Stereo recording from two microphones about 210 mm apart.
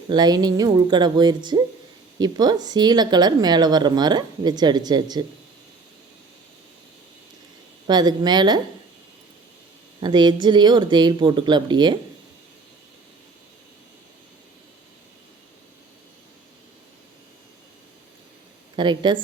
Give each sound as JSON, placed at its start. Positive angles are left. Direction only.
{"t": 0.1, "sound": "speech", "side_deg": -20}
{"t": 7.9, "sound": "speech", "side_deg": -20}
{"t": 10.0, "sound": "speech", "side_deg": -20}
{"t": 18.8, "sound": "speech", "side_deg": -20}